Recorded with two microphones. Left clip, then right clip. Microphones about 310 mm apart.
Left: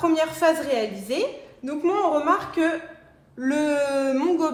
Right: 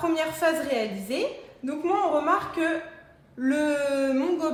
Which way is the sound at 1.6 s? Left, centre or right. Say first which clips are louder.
Left 2 dB; left.